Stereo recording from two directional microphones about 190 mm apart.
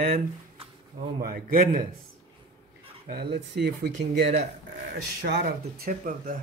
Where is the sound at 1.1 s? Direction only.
50° right (ahead or behind).